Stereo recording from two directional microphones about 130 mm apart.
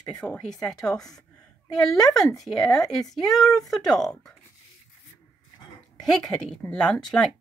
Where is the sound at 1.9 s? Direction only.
25° left (ahead or behind).